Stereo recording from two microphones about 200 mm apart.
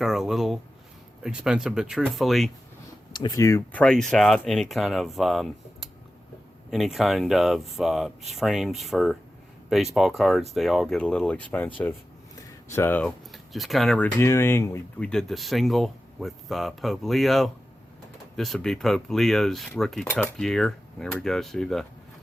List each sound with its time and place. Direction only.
0.0 s a sound: centre (ahead or behind)
1.2 s speech: 5° right (ahead or behind)
3.1 s speech: 20° left (ahead or behind)
12.7 s speech: 10° left (ahead or behind)
15.1 s speech: centre (ahead or behind)